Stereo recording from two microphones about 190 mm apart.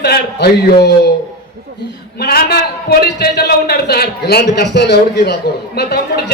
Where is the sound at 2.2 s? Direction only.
55° left (ahead or behind).